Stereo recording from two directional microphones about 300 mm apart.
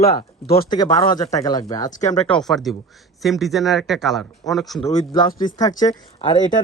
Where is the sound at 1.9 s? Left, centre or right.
Left.